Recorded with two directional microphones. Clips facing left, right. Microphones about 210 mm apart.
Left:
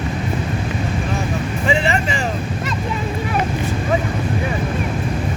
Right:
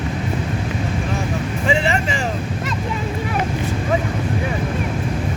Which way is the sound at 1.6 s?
25° right (ahead or behind).